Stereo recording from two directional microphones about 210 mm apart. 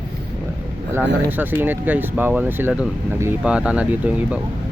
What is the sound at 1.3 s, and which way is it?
Speech, 10° right (ahead or behind).